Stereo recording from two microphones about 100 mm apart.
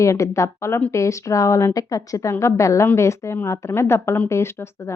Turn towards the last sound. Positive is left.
turn(degrees=25)  # may be behind; listen again after turning